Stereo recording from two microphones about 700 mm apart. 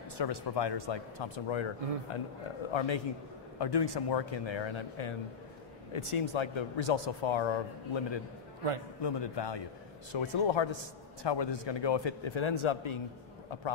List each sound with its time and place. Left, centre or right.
0.2 s speech: left
3.5 s speech: left